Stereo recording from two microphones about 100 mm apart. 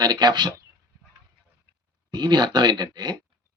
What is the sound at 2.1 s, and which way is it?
Speech, 45° right (ahead or behind).